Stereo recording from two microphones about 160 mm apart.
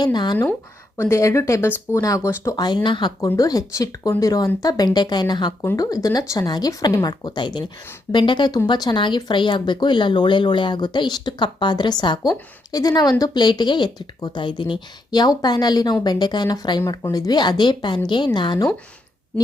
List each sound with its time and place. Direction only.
0.0 s speech: 25° left (ahead or behind)
0.9 s speech: 15° left (ahead or behind)
3.2 s speech: 20° left (ahead or behind)